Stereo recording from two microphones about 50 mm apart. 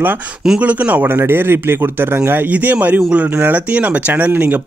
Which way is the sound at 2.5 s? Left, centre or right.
Right.